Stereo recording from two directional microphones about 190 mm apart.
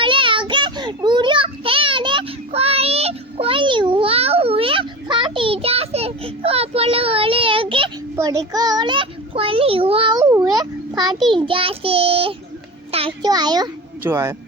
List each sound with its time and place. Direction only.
0.0 s child singing: 25° right (ahead or behind)
8.1 s a child's voice: 15° right (ahead or behind)
11.3 s child singing: 25° right (ahead or behind)
12.9 s a child's voice: 30° right (ahead or behind)